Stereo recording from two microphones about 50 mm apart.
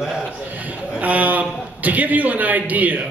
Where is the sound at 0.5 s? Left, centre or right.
Right.